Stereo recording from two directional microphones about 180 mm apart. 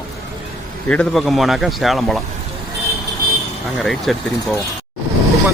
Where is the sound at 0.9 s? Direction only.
Centre (ahead or behind).